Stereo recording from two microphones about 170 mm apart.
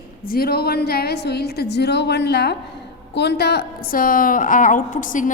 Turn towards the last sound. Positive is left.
turn(degrees=50)  # may be behind; listen again after turning